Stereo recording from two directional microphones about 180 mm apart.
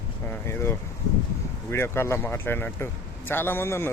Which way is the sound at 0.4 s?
15° left (ahead or behind).